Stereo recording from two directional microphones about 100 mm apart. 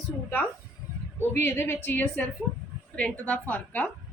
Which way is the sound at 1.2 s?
20° left (ahead or behind).